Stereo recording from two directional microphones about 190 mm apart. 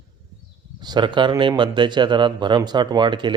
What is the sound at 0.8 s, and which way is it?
A man's voice, 25° right (ahead or behind).